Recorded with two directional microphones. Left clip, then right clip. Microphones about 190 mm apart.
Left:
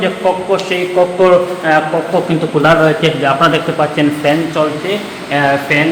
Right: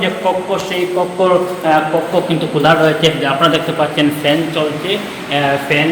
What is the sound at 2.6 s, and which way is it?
A man's voice, 30° left (ahead or behind).